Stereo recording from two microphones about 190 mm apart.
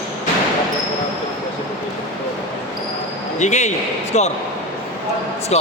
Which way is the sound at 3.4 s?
40° left (ahead or behind).